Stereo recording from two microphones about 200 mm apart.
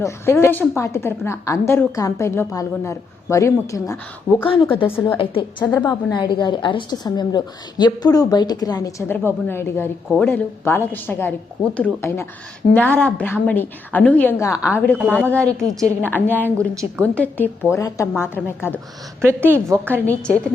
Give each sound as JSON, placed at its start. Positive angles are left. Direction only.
{"t": 0.0, "sound": "a woman's voice", "side_deg": 15}
{"t": 4.4, "sound": "a woman's voice", "side_deg": 25}
{"t": 14.9, "sound": "a woman's voice", "side_deg": -5}
{"t": 15.2, "sound": "a woman's voice", "side_deg": 5}
{"t": 15.6, "sound": "a woman's voice", "side_deg": -15}
{"t": 17.0, "sound": "a woman's voice", "side_deg": 10}
{"t": 19.2, "sound": "a woman's voice", "side_deg": -10}
{"t": 20.1, "sound": "a woman's voice", "side_deg": 5}